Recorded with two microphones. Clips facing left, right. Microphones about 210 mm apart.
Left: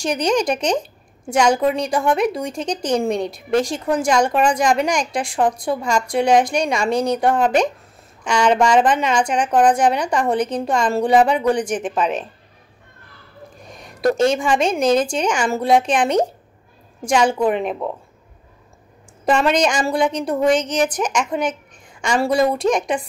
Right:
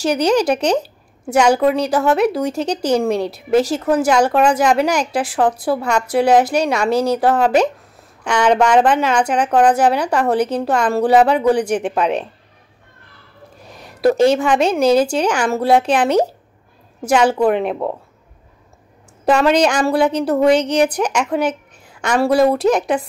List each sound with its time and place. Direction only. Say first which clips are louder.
0.0 s a woman's voice: right 4 dB; 5° right (ahead or behind)
8.2 s speech: right 1 dB; 60° right (ahead or behind)
8.5 s speech: right 2 dB; 5° right (ahead or behind)
13.6 s a woman's voice: right 4 dB; 5° right (ahead or behind)
19.2 s speech: right 3 dB; 5° right (ahead or behind)
19.7 s a woman's voice: right 4 dB; 60° right (ahead or behind)
20.0 s speech: right 4 dB; 5° right (ahead or behind)
20.5 s a woman's voice: right 4 dB; 60° right (ahead or behind)
21.4 s a sound: right 3 dB; 5° right (ahead or behind)
22.1 s speech: right 4 dB; 5° right (ahead or behind)